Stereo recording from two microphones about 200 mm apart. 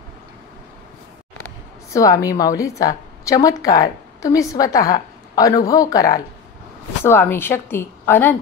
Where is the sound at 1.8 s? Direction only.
15° left (ahead or behind).